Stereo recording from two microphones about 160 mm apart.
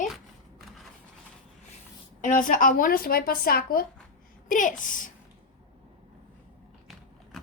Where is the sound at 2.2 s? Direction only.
55° left (ahead or behind).